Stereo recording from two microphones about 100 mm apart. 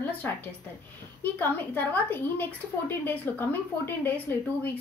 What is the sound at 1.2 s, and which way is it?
A woman's voice, 20° left (ahead or behind).